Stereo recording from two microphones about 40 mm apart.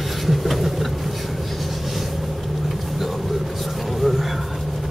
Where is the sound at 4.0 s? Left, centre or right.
Centre.